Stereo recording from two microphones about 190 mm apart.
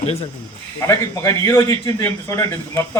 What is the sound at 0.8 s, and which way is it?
A man's voice, 15° left (ahead or behind).